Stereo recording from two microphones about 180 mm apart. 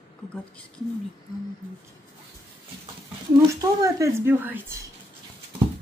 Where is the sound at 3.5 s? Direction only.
20° right (ahead or behind).